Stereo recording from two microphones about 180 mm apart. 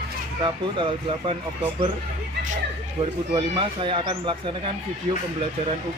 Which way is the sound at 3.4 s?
25° right (ahead or behind).